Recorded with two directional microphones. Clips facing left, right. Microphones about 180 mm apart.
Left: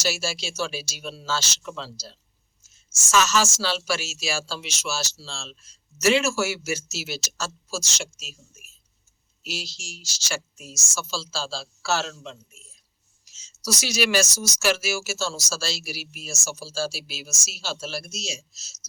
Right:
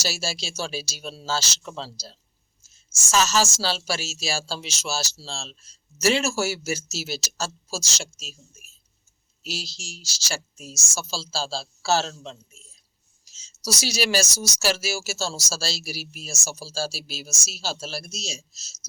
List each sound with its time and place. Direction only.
0.0 s a woman's voice: 35° right (ahead or behind)
13.2 s a sound: 35° right (ahead or behind)
13.7 s a woman's voice: 35° right (ahead or behind)